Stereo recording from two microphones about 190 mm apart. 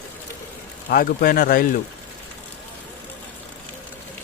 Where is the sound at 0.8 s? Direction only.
50° left (ahead or behind).